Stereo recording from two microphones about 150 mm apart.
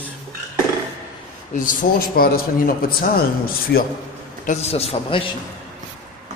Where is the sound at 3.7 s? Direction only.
90° left.